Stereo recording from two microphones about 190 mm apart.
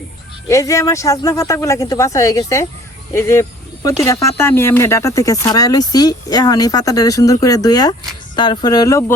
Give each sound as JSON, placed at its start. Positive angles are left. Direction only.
{"t": 0.4, "sound": "speech", "side_deg": 15}